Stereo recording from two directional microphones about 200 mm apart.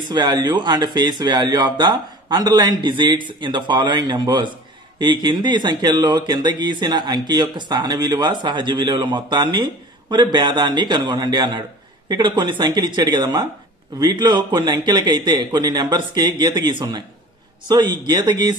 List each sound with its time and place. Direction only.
0.1 s speech: 20° right (ahead or behind)